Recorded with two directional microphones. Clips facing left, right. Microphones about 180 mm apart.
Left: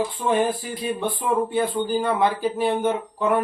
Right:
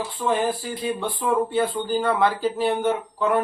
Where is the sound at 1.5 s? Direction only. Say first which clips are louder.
Even; 20° left (ahead or behind).